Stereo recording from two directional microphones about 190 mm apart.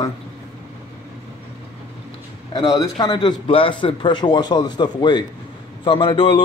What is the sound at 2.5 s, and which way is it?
A man's voice, 20° left (ahead or behind).